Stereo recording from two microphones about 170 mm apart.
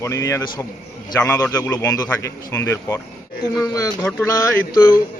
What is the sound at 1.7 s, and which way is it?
Speech, 20° left (ahead or behind).